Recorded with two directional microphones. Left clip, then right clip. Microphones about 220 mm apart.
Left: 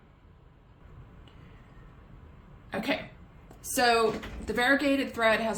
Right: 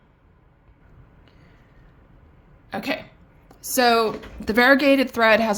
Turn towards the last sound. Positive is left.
turn(degrees=-55)  # may be behind; listen again after turning